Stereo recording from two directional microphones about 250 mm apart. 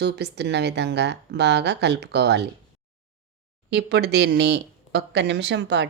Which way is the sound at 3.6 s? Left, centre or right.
Right.